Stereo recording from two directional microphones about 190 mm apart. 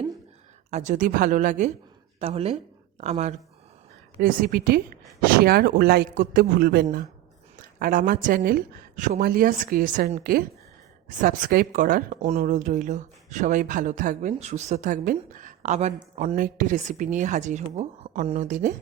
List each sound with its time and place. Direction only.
0.7 s a woman's voice: 40° right (ahead or behind)
4.2 s a woman's voice: 50° right (ahead or behind)
16.3 s speech: 50° right (ahead or behind)